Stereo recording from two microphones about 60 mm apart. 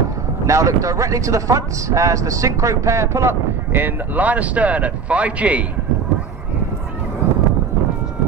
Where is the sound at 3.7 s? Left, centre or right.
Right.